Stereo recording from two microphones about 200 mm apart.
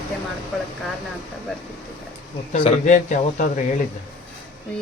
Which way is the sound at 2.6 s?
35° left (ahead or behind).